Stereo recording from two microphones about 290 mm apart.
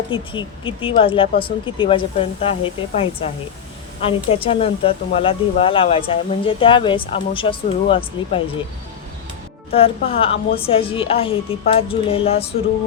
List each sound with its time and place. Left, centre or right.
0.1 s speech: centre
9.7 s speech: centre